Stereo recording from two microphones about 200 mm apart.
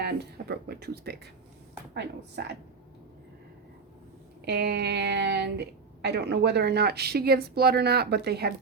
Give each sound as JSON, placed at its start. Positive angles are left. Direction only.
{"t": 0.0, "sound": "a woman's voice", "side_deg": -55}
{"t": 4.4, "sound": "a woman's voice", "side_deg": -55}